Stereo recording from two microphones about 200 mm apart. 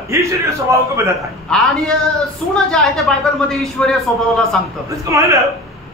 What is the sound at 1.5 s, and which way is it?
A woman's voice, centre (ahead or behind).